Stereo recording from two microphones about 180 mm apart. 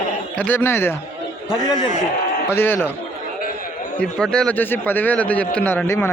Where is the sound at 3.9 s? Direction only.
5° left (ahead or behind).